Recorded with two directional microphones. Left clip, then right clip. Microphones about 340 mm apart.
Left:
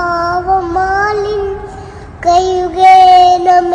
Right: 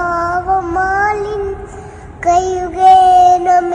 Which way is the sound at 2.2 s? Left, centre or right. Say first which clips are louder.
Left 3 dB; left.